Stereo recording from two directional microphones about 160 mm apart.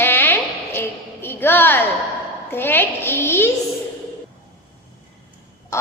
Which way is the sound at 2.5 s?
15° left (ahead or behind).